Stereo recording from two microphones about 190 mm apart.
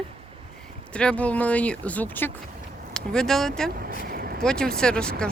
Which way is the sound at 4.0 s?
50° right (ahead or behind).